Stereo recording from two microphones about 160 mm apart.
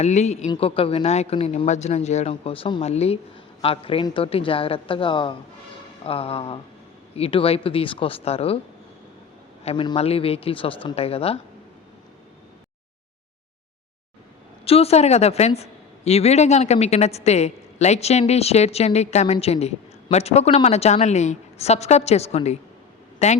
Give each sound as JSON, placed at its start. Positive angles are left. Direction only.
{"t": 0.0, "sound": "a woman's voice", "side_deg": 45}
{"t": 9.6, "sound": "a woman's voice", "side_deg": 35}
{"t": 14.6, "sound": "speech", "side_deg": 40}